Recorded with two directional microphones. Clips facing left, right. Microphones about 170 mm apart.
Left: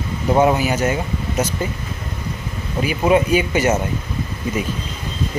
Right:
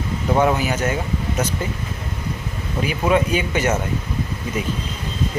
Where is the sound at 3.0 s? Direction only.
10° left (ahead or behind).